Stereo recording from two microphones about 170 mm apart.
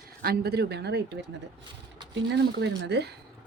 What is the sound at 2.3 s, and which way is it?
Speech, 90° right.